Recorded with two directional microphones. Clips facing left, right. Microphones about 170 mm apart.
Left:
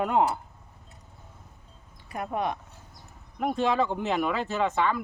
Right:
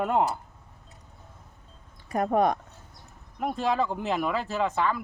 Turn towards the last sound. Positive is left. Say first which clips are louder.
# left 1 dB
turn(degrees=0)  # may be behind; listen again after turning